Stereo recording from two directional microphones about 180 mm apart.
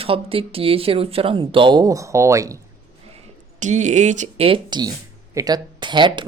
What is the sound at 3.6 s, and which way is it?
Speech, 40° right (ahead or behind).